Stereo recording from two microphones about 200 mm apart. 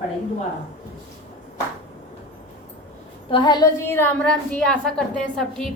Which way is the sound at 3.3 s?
25° left (ahead or behind).